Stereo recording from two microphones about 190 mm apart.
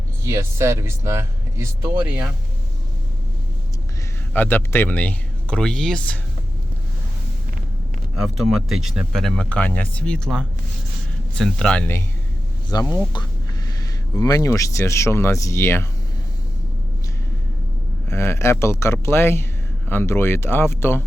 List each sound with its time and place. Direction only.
0.3 s speech: 15° right (ahead or behind)
4.4 s speech: 10° left (ahead or behind)
8.2 s speech: centre (ahead or behind); by 13.0 s 15° left (ahead or behind)
14.1 s speech: 20° left (ahead or behind)
18.1 s speech: 15° left (ahead or behind)